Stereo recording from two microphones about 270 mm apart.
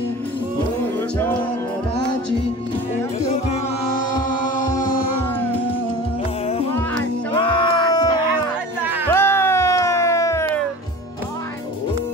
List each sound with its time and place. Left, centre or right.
3.3 s music: left
7.3 s a sound: centre
9.1 s music: centre